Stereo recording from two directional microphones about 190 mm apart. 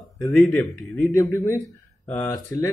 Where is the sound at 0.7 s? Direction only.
Centre (ahead or behind).